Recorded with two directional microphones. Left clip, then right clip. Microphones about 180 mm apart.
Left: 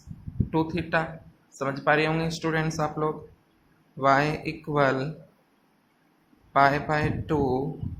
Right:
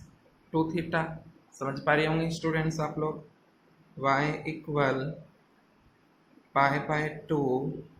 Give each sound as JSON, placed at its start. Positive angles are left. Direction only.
{"t": 0.5, "sound": "speech", "side_deg": 20}
{"t": 6.5, "sound": "speech", "side_deg": 20}